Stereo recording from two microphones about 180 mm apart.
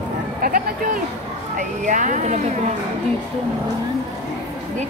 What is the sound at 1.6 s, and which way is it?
Speech, 45° right (ahead or behind).